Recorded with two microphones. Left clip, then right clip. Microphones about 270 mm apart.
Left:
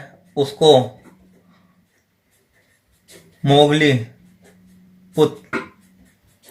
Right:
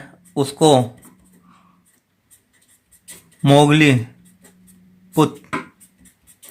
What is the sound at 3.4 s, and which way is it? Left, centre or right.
Speech, right.